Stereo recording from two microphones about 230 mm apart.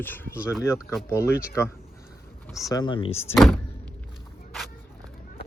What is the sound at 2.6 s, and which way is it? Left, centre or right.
Speech, centre.